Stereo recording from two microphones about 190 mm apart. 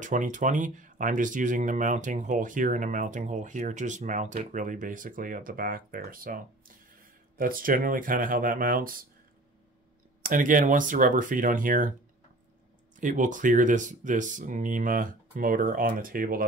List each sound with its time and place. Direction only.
0.0 s speech: 40° right (ahead or behind)
10.2 s speech: 45° right (ahead or behind)
12.9 s speech: 45° right (ahead or behind)